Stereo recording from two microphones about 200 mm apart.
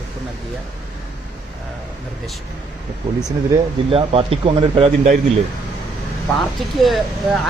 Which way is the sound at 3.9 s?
30° right (ahead or behind).